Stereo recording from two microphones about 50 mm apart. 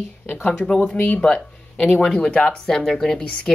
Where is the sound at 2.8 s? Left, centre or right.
Centre.